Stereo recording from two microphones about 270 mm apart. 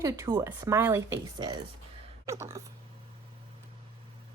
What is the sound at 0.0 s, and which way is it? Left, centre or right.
Speech, centre.